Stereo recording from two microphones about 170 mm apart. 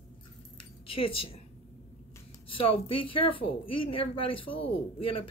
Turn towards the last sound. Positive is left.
turn(degrees=30)  # may be behind; listen again after turning